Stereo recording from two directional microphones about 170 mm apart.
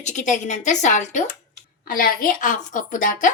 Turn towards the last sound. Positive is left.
turn(degrees=50)  # may be behind; listen again after turning